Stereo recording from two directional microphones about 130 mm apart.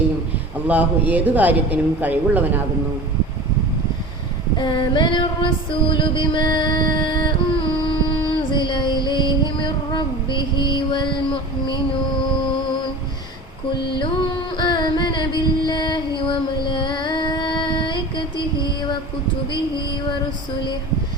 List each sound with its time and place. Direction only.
0.7 s speech: 10° right (ahead or behind)
4.5 s female singing: 35° left (ahead or behind)
14.5 s music: 35° left (ahead or behind)
18.6 s a sound: 35° left (ahead or behind)